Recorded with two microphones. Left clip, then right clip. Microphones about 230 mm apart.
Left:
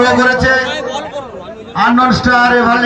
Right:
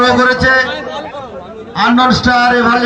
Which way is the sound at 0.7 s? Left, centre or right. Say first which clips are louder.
Left 2 dB; left.